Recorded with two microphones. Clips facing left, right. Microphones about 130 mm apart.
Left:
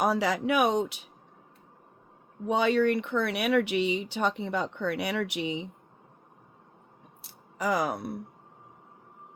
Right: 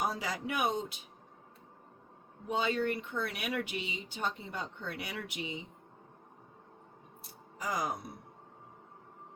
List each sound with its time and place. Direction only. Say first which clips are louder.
0.0 s speech: left 9 dB; 75° left (ahead or behind)
2.5 s speech: left 8 dB; 75° left (ahead or behind)
7.2 s speech: left 10 dB; 75° left (ahead or behind)